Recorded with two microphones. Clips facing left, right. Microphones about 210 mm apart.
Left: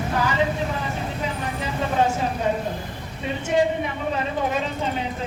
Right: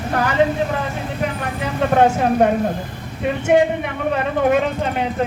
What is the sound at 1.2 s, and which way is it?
Vehicle, 60° right (ahead or behind).